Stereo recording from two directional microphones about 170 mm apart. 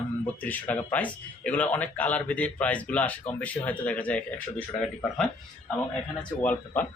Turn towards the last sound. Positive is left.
turn(degrees=10)  # may be behind; listen again after turning